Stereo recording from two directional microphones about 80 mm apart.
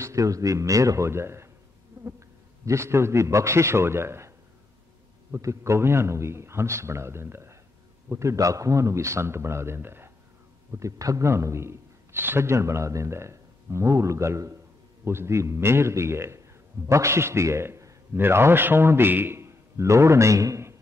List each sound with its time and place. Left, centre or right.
0.0 s a man's voice: right
5.3 s a man's voice: right
10.7 s a man's voice: right